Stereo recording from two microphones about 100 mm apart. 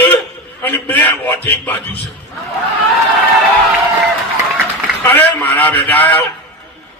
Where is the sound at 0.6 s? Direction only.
20° left (ahead or behind).